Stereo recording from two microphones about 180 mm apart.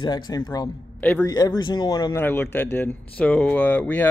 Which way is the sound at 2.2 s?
10° left (ahead or behind).